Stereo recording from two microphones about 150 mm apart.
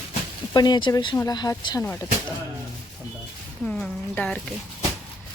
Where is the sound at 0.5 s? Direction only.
30° left (ahead or behind).